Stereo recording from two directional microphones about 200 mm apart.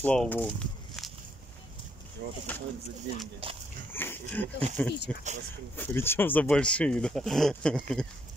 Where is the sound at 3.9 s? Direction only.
10° left (ahead or behind).